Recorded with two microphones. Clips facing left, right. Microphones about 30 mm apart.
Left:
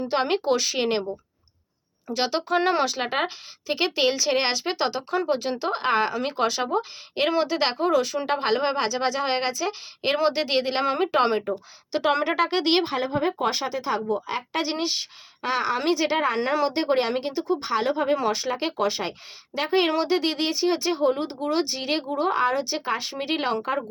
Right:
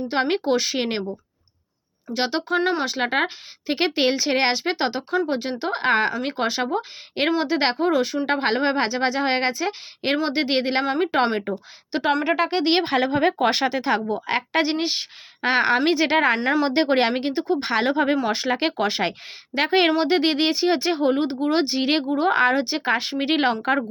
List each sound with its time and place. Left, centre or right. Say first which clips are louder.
0.1 s speech: right 2 dB; centre
2.1 s a woman's voice: right 1 dB; centre
10.8 s speech: right 1 dB; centre
11.5 s speech: even; right
11.9 s a woman's voice: right 1 dB; centre
12.2 s speech: right 2 dB; centre
12.8 s speech: right 5 dB; right
16.4 s speech: right 2 dB; centre
16.6 s speech: right 4 dB; right
22.1 s speech: right 3 dB; right